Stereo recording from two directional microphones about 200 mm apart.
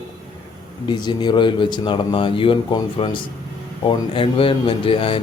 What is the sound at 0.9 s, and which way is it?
A man's voice, 20° left (ahead or behind).